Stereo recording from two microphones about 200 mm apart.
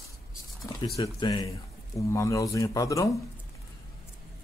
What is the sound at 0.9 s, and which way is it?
A man's voice, 20° left (ahead or behind).